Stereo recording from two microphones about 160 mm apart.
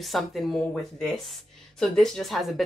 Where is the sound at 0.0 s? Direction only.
Centre (ahead or behind).